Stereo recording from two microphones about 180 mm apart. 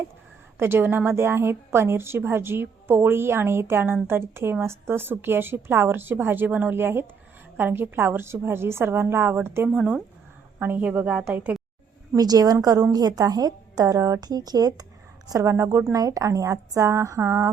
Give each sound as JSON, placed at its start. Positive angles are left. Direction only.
{"t": 0.6, "sound": "a woman's voice", "side_deg": -10}
{"t": 12.1, "sound": "a woman's voice", "side_deg": -20}